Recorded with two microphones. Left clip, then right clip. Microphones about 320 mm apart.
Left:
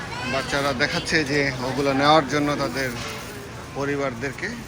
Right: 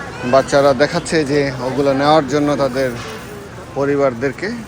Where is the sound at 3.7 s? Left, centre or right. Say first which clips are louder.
Right 10 dB; centre.